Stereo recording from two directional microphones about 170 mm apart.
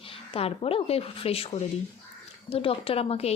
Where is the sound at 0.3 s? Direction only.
35° left (ahead or behind).